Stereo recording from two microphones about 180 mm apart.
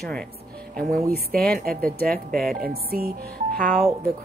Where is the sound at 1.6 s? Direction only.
50° right (ahead or behind).